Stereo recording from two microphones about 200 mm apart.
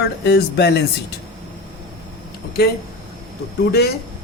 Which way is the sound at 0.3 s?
55° left (ahead or behind).